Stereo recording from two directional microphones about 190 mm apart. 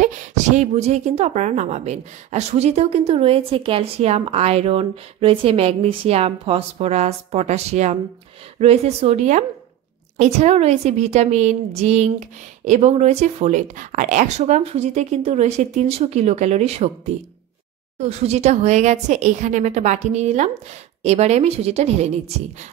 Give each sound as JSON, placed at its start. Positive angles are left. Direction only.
{"t": 0.0, "sound": "speech", "side_deg": -40}
{"t": 17.9, "sound": "speech", "side_deg": -35}